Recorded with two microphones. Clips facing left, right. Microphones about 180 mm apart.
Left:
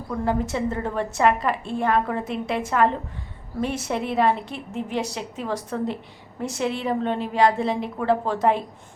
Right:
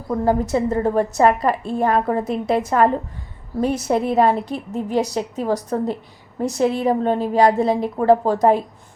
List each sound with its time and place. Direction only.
0.1 s a woman's voice: 40° right (ahead or behind)